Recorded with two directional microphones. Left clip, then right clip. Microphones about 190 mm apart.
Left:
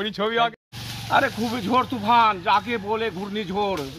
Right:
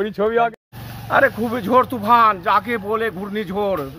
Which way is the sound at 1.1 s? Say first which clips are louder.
Right 5 dB; 20° right (ahead or behind).